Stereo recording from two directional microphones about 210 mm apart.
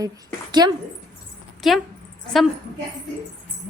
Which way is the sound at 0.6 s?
20° right (ahead or behind).